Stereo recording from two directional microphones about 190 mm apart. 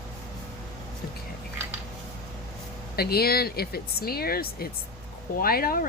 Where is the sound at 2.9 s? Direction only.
55° left (ahead or behind).